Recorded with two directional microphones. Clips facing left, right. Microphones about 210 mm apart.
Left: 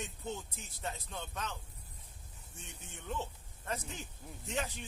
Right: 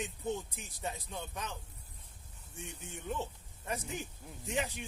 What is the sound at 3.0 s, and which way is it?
Speech, 15° right (ahead or behind).